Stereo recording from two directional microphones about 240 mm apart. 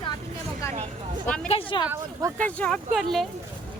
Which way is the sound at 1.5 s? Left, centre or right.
Left.